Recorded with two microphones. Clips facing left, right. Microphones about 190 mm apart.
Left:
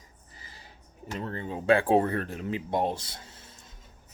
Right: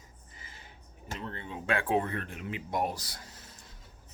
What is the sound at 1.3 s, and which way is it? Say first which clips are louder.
Speech: left 9 dB; 40° left (ahead or behind).